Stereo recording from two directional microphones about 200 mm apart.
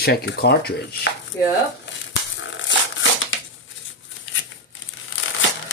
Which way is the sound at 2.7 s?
75° left (ahead or behind).